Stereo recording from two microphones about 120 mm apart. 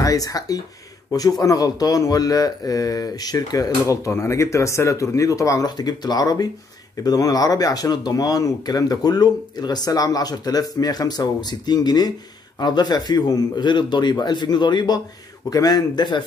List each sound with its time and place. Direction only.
0.0 s speech: 30° left (ahead or behind)